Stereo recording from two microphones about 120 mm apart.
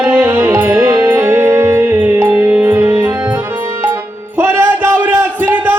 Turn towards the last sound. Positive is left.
turn(degrees=-15)  # may be behind; listen again after turning